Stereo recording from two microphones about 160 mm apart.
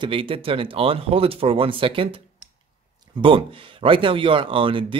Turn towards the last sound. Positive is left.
turn(degrees=-35)  # may be behind; listen again after turning